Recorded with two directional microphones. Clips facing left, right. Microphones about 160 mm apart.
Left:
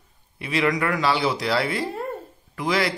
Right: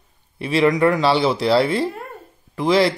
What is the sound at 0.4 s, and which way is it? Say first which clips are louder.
Speech: right 7 dB; 30° right (ahead or behind).